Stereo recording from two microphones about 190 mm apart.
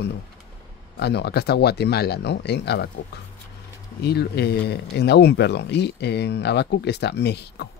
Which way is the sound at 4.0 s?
60° left (ahead or behind).